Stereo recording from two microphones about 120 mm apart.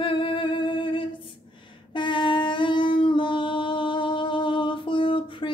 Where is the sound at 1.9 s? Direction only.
40° left (ahead or behind).